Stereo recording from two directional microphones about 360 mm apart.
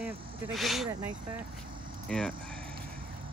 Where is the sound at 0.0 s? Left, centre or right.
Centre.